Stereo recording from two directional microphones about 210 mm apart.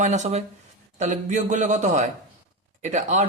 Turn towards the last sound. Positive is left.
turn(degrees=-35)  # may be behind; listen again after turning